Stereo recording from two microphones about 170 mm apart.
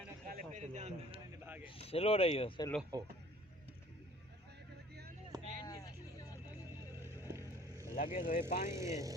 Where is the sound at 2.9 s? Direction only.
25° right (ahead or behind).